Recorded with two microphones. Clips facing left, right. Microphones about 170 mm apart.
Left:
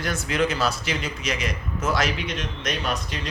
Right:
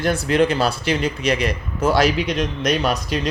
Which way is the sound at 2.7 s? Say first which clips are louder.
Right 6 dB; 75° right (ahead or behind).